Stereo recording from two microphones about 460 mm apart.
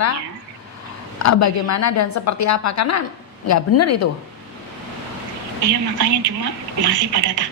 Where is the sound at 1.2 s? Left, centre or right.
Left.